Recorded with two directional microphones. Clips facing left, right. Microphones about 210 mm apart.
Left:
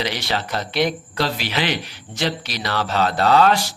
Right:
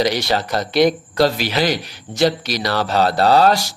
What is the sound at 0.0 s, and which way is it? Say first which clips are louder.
Speech: right 6 dB; 40° right (ahead or behind).